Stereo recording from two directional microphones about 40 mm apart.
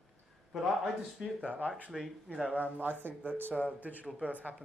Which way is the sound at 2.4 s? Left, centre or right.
Right.